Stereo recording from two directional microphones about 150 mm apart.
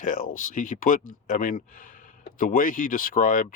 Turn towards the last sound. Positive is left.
turn(degrees=65)  # may be behind; listen again after turning